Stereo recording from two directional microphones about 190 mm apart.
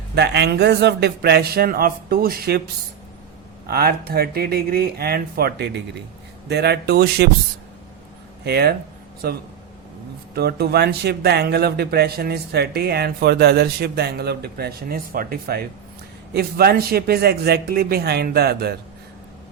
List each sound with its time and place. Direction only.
0.1 s speech: 60° right (ahead or behind)
3.7 s speech: 55° right (ahead or behind)
8.4 s a man's voice: 55° right (ahead or behind)